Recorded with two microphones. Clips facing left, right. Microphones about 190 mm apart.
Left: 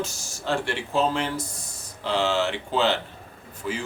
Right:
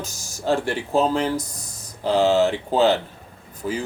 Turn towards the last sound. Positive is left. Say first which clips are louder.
# right 4 dB
turn(degrees=-40)  # may be behind; listen again after turning